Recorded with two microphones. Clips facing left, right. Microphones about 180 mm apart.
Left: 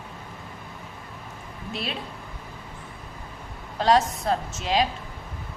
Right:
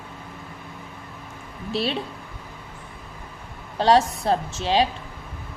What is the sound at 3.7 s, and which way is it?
A woman's voice, 30° right (ahead or behind).